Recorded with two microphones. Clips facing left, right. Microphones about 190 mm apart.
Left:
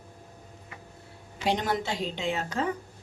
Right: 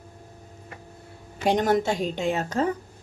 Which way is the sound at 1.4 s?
45° right (ahead or behind).